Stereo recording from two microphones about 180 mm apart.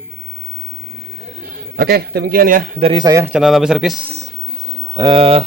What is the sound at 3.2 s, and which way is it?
Speech, 5° right (ahead or behind).